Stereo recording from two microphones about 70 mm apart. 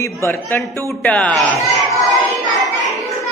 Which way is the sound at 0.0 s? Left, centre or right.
Left.